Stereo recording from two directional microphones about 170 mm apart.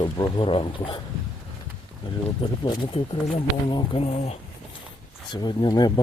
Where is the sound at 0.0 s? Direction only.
30° left (ahead or behind).